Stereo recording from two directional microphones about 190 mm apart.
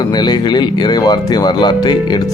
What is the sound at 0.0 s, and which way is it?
Speech, 20° left (ahead or behind).